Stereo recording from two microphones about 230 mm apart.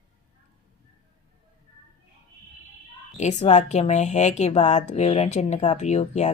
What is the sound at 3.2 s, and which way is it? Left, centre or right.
Speech, left.